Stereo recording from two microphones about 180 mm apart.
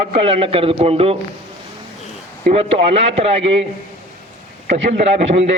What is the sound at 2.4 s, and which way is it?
A man's voice, 35° right (ahead or behind).